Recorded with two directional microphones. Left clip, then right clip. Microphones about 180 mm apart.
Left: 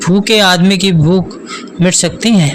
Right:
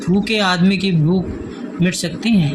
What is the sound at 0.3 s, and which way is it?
Speech, 50° left (ahead or behind).